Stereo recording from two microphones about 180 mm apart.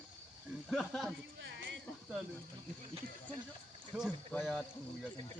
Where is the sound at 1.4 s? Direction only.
85° right.